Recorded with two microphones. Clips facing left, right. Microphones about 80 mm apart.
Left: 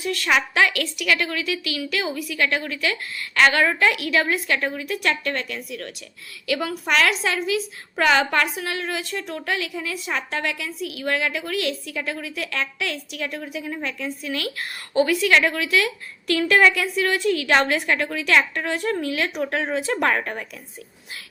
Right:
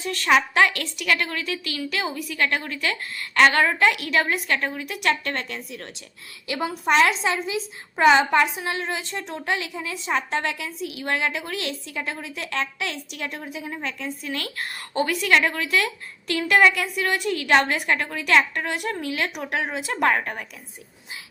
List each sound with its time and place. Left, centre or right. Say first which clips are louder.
0.0 s a woman's voice: right 2 dB; right
16.6 s a woman's voice: right 1 dB; right